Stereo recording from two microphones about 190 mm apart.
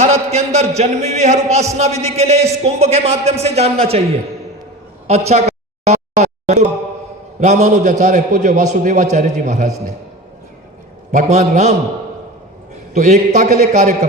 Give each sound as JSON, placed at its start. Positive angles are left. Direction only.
{"t": 0.0, "sound": "a sound", "side_deg": -35}
{"t": 0.8, "sound": "a man's voice", "side_deg": -35}
{"t": 5.3, "sound": "a sound", "side_deg": -35}
{"t": 7.3, "sound": "a man's voice", "side_deg": -40}
{"t": 11.1, "sound": "a man's voice", "side_deg": -40}
{"t": 12.9, "sound": "a man's voice", "side_deg": -40}